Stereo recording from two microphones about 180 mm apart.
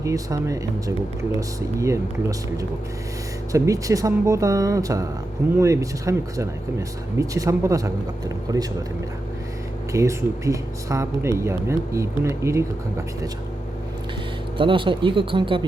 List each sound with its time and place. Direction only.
0.0 s speech: 20° right (ahead or behind)
3.5 s speech: 20° right (ahead or behind)
9.9 s speech: 15° right (ahead or behind)
14.6 s speech: 30° right (ahead or behind)